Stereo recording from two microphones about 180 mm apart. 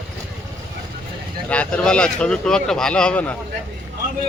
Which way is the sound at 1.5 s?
5° left (ahead or behind).